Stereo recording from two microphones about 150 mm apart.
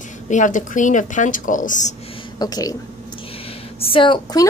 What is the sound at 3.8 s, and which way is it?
Speech, 35° left (ahead or behind).